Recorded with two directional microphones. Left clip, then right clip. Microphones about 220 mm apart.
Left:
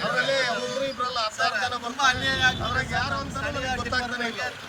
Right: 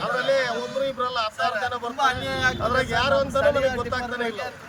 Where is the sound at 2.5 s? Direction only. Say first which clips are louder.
Right 3 dB; 35° right (ahead or behind).